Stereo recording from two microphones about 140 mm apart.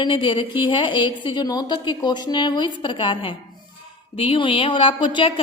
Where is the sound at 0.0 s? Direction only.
35° left (ahead or behind).